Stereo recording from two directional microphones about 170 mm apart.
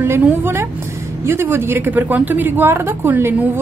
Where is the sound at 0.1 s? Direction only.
15° right (ahead or behind).